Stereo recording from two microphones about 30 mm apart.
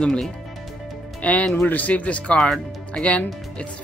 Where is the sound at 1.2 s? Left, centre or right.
Left.